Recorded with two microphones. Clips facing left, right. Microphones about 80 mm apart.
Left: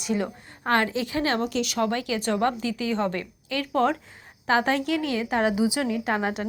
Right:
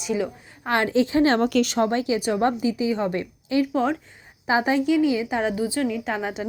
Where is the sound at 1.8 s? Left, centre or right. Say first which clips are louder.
Right 3 dB; right.